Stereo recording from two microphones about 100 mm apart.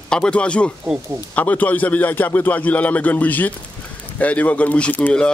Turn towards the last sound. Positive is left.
turn(degrees=15)  # may be behind; listen again after turning